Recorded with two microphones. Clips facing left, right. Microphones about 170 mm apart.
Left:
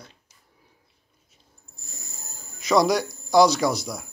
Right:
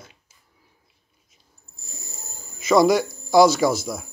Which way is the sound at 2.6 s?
Centre (ahead or behind).